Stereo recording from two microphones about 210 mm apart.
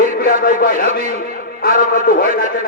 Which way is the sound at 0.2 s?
45° left (ahead or behind).